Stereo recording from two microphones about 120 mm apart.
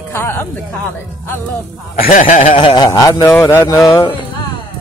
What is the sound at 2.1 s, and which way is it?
Snicker, 90° left.